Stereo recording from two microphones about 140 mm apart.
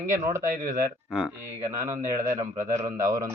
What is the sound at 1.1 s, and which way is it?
Speech, 10° right (ahead or behind).